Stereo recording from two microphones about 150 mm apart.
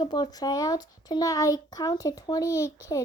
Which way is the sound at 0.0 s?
30° left (ahead or behind).